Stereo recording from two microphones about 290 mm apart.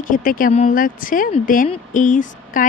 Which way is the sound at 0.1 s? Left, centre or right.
Left.